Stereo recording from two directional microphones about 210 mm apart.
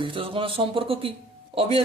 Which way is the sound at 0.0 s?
25° right (ahead or behind).